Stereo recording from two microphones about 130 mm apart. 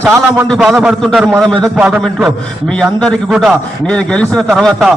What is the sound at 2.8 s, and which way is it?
A man's voice, 5° left (ahead or behind).